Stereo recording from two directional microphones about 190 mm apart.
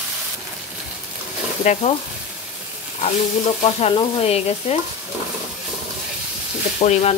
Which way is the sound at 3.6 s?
30° left (ahead or behind).